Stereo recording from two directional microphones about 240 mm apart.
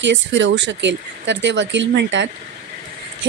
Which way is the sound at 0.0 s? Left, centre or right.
Right.